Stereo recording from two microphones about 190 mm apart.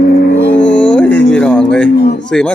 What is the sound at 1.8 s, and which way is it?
Speech, 60° left (ahead or behind).